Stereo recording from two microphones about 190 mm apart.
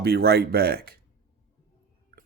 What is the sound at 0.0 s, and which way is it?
Speech, 55° right (ahead or behind).